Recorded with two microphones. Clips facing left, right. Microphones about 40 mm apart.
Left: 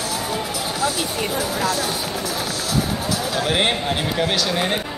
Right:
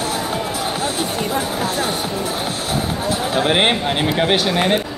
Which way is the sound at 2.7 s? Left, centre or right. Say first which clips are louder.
Right 1 dB; right.